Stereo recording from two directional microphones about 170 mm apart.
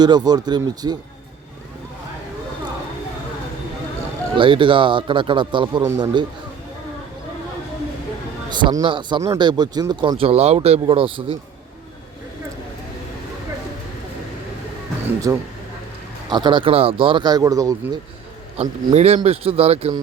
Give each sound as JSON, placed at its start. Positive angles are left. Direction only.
{"t": 0.0, "sound": "speech", "side_deg": -25}
{"t": 4.4, "sound": "speech", "side_deg": -30}
{"t": 8.4, "sound": "speech", "side_deg": -25}
{"t": 15.3, "sound": "speech", "side_deg": -20}
{"t": 18.9, "sound": "speech", "side_deg": -40}